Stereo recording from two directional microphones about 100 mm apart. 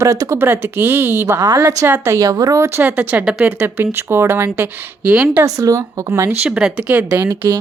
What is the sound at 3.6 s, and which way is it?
Speech, 20° right (ahead or behind).